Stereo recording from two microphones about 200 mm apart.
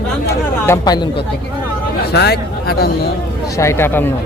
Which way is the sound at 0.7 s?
20° left (ahead or behind).